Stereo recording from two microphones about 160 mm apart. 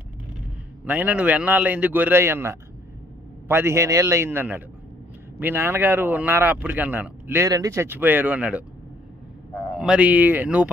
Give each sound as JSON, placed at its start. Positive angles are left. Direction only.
{"t": 0.8, "sound": "speech", "side_deg": -10}
{"t": 9.8, "sound": "speech", "side_deg": -5}